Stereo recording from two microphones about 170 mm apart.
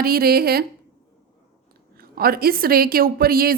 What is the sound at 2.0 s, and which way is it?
A woman's voice, 60° right (ahead or behind).